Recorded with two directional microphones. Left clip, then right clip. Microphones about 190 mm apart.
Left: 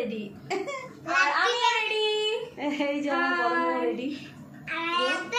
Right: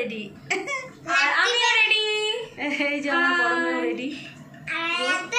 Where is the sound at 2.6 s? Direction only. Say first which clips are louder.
Right 4 dB; 15° left (ahead or behind).